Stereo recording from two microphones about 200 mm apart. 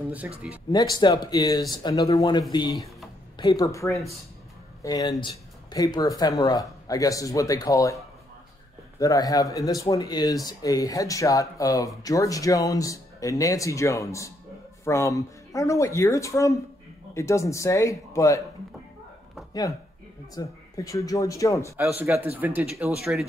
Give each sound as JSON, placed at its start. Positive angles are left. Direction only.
{"t": 0.7, "sound": "speech", "side_deg": 20}
{"t": 9.0, "sound": "speech", "side_deg": 20}
{"t": 20.3, "sound": "speech", "side_deg": 15}
{"t": 21.7, "sound": "speech", "side_deg": -10}